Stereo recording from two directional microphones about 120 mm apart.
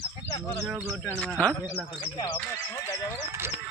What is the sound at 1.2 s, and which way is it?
Speech, 10° left (ahead or behind).